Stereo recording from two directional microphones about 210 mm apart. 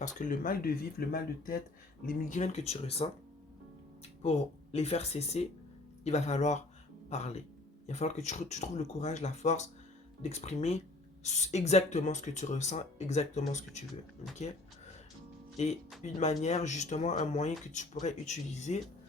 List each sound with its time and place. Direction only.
0.0 s speech: 40° left (ahead or behind)
4.2 s speech: 30° left (ahead or behind)
16.0 s speech: 35° left (ahead or behind)